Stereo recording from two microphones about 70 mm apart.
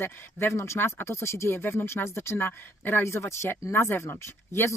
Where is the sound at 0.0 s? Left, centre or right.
Left.